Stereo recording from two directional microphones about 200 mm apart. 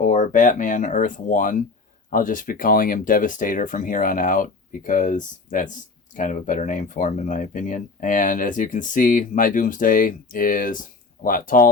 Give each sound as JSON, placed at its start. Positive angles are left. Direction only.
{"t": 0.0, "sound": "speech", "side_deg": 40}